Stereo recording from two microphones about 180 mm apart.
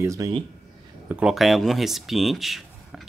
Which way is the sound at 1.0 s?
5° right (ahead or behind).